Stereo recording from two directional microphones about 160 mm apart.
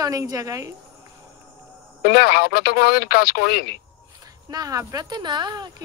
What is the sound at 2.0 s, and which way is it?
Speech, 75° left (ahead or behind).